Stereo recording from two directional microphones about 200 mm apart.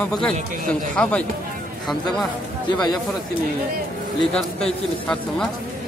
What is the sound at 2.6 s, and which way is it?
Speech, 20° left (ahead or behind).